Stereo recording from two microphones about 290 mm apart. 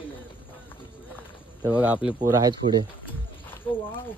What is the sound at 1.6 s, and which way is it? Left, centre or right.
Speech, centre.